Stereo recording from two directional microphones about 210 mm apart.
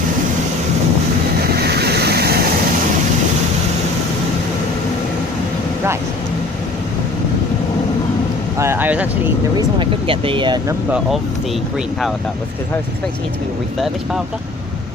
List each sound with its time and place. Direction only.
1.5 s vehicle: 50° right (ahead or behind)
8.5 s a sound: 10° right (ahead or behind)
9.6 s speech: 25° right (ahead or behind)
13.7 s speech: centre (ahead or behind)